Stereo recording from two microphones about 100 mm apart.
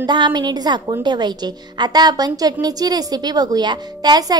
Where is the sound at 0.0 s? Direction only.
45° right (ahead or behind).